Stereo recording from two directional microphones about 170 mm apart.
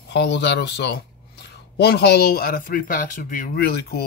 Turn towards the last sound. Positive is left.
turn(degrees=65)  # may be behind; listen again after turning